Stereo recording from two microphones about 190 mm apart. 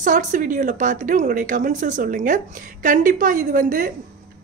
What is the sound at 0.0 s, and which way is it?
Speech, 45° right (ahead or behind).